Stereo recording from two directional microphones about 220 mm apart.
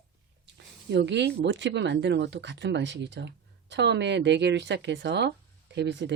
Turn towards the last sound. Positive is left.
turn(degrees=-50)  # may be behind; listen again after turning